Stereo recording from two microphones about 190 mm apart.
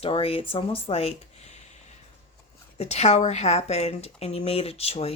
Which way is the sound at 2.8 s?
35° left (ahead or behind).